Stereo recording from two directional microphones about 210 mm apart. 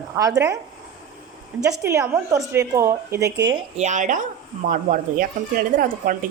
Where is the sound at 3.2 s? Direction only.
55° right (ahead or behind).